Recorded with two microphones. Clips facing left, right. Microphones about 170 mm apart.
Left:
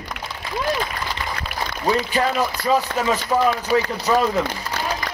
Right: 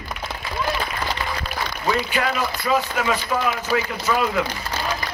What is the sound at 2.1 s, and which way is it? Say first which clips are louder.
A man's voice: left 3 dB; 40° left (ahead or behind).